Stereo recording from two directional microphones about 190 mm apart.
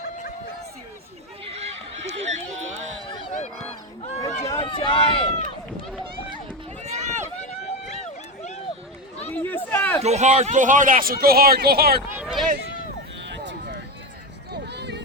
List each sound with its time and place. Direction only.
1.5 s a sound: 35° right (ahead or behind)
3.4 s a sound: 35° left (ahead or behind)
4.4 s speech: 20° left (ahead or behind)
6.8 s run: 40° right (ahead or behind)
7.4 s run: 35° left (ahead or behind)
9.3 s speech: 10° left (ahead or behind)
10.0 s speech: 35° right (ahead or behind); by 12.0 s 55° right (ahead or behind)
12.1 s run: 5° right (ahead or behind)
13.2 s vehicle: 65° right (ahead or behind)